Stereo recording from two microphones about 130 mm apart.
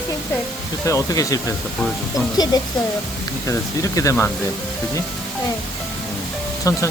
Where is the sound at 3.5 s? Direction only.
25° left (ahead or behind).